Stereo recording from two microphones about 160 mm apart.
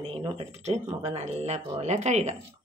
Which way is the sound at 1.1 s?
45° right (ahead or behind).